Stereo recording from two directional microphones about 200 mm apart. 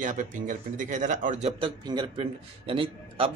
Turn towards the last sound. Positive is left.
turn(degrees=-25)  # may be behind; listen again after turning